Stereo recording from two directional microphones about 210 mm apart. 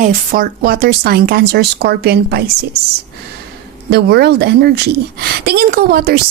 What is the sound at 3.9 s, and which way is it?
Speech, 50° right (ahead or behind).